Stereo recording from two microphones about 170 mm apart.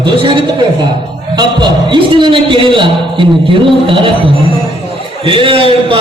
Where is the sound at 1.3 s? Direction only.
25° right (ahead or behind).